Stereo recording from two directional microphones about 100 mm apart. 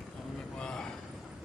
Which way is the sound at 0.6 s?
5° left (ahead or behind).